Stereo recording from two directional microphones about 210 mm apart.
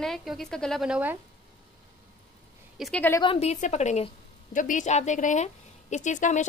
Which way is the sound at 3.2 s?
25° left (ahead or behind).